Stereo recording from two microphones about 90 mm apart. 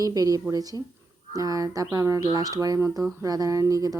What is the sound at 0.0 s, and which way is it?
Speech, 45° right (ahead or behind).